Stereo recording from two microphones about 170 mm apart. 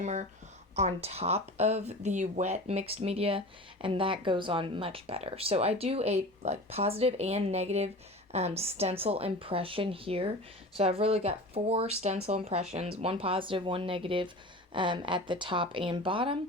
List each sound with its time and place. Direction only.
0.0 s speech: 45° right (ahead or behind)